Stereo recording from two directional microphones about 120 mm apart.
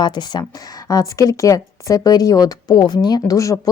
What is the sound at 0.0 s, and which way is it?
Speech, 35° left (ahead or behind).